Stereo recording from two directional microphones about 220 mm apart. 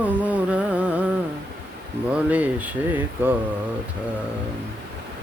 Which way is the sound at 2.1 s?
5° right (ahead or behind).